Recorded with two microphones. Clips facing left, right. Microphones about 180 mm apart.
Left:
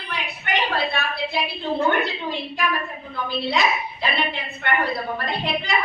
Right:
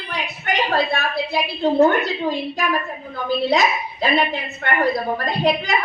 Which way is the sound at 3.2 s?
45° right (ahead or behind).